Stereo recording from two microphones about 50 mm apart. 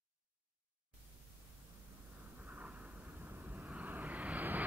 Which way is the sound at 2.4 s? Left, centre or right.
Right.